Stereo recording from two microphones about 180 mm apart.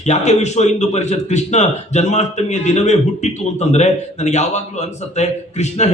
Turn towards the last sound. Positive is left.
turn(degrees=40)  # may be behind; listen again after turning